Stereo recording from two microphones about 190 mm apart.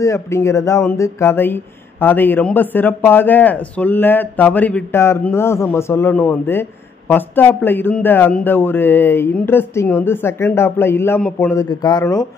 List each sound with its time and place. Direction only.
0.0 s speech: 15° left (ahead or behind)
11.7 s speech: 20° left (ahead or behind)